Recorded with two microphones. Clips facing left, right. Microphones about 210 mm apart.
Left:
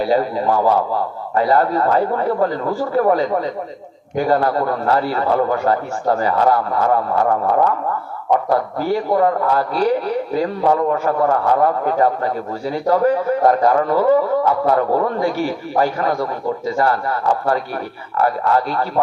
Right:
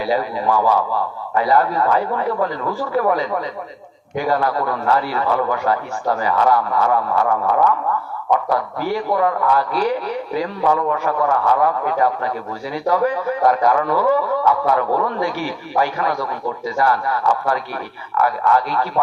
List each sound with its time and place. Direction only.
0.0 s a man's voice: 45° left (ahead or behind)
9.1 s a man's voice: 35° left (ahead or behind)
12.9 s a man's voice: 35° left (ahead or behind)
16.0 s a man's voice: 30° left (ahead or behind)
16.6 s a man's voice: 45° left (ahead or behind)